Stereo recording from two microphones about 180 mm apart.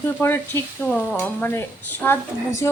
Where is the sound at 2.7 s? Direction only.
15° left (ahead or behind).